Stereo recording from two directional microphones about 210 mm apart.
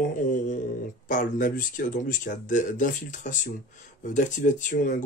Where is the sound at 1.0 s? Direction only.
40° left (ahead or behind).